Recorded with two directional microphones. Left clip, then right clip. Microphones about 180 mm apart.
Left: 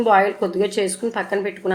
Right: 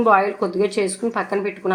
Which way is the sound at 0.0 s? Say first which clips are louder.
Even; 35° right (ahead or behind).